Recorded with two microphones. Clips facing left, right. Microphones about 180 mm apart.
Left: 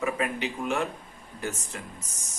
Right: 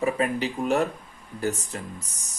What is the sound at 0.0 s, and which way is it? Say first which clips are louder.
Speech: right 4 dB; 35° right (ahead or behind).